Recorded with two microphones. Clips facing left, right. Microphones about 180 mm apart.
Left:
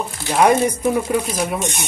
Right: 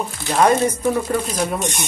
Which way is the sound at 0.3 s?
15° left (ahead or behind).